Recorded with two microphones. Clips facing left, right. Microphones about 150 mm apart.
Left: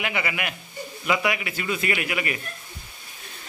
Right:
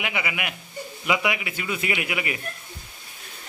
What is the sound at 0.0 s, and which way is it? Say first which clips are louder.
A man's voice: left 1 dB; 10° right (ahead or behind).